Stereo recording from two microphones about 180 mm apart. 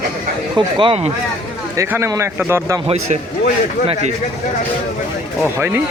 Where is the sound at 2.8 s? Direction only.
35° right (ahead or behind).